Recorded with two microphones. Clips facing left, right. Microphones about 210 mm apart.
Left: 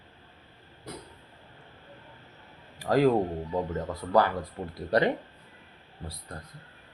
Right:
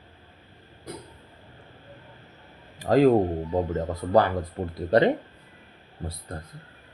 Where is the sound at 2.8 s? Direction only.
20° right (ahead or behind).